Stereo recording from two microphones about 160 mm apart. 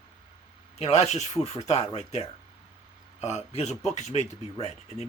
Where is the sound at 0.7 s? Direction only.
45° left (ahead or behind).